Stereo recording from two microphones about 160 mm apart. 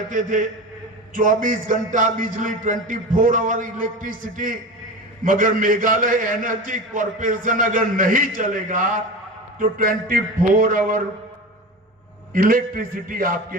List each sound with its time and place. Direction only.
0.1 s a man's voice: 55° right (ahead or behind)
12.3 s a man's voice: 60° right (ahead or behind)